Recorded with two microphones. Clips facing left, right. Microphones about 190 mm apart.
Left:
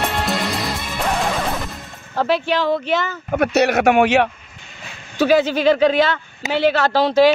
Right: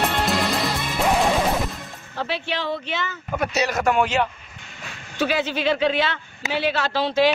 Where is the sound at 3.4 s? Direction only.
60° left (ahead or behind).